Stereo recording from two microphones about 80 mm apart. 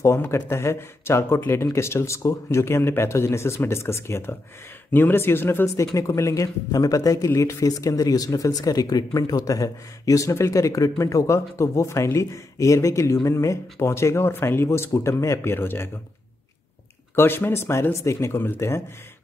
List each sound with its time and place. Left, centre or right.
0.0 s speech: left
5.9 s a man's voice: left
17.1 s speech: left